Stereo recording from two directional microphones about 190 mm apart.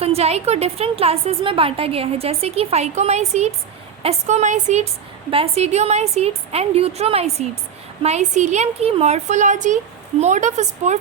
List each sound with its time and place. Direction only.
0.0 s a woman's voice: 35° right (ahead or behind)